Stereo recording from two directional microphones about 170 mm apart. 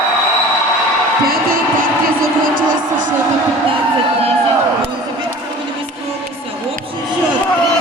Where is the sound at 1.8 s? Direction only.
55° right (ahead or behind).